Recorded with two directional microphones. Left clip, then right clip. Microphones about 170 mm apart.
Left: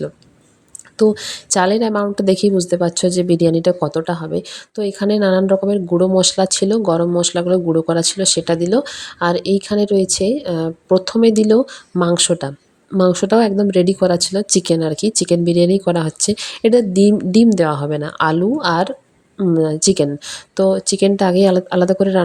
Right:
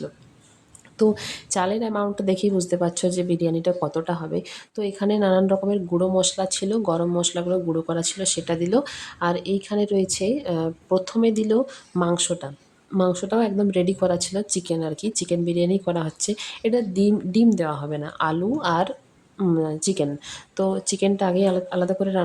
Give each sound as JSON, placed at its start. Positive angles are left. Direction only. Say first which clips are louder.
{"t": 0.9, "sound": "speech", "louder": "left 6 dB", "side_deg": 20}
{"t": 1.5, "sound": "speech", "louder": "left 8 dB", "side_deg": 40}
{"t": 13.6, "sound": "speech", "louder": "left 7 dB", "side_deg": 25}
{"t": 14.5, "sound": "speech", "louder": "left 10 dB", "side_deg": 40}
{"t": 19.5, "sound": "speech", "louder": "left 11 dB", "side_deg": 35}